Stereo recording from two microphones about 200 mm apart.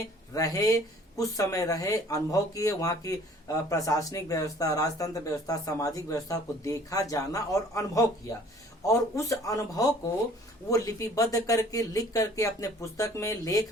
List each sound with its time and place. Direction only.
0.3 s speech: 20° left (ahead or behind)